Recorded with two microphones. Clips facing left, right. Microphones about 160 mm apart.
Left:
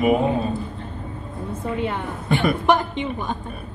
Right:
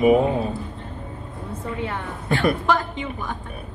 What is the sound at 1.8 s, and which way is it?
A woman's voice, 20° left (ahead or behind).